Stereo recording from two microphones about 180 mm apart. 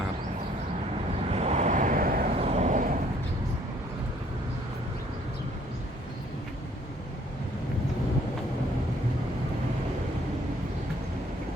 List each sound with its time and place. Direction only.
1.3 s vehicle: 35° right (ahead or behind); by 2.3 s 50° right (ahead or behind)
2.3 s vehicle: 35° right (ahead or behind)